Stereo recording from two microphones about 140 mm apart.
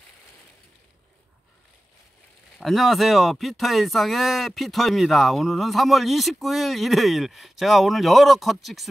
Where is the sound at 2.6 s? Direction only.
Centre (ahead or behind).